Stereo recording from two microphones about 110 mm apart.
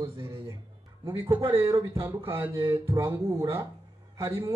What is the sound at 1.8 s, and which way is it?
Speech, 25° right (ahead or behind).